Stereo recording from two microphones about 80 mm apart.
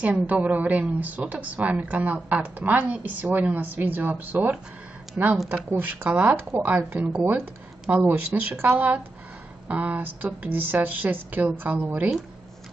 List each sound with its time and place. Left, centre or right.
0.0 s a woman's voice: centre